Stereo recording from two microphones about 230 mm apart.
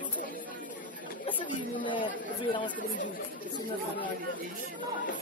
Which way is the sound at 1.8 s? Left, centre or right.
Left.